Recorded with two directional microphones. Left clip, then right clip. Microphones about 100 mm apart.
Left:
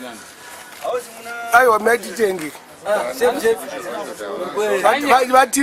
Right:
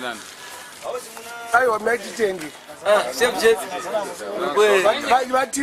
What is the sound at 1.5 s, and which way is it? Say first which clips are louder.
Speech: left 5 dB; 40° left (ahead or behind).